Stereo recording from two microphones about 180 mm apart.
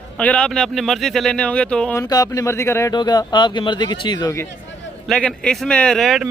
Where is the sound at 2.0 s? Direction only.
20° left (ahead or behind).